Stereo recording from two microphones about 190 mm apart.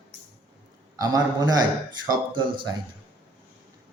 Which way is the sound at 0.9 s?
20° right (ahead or behind).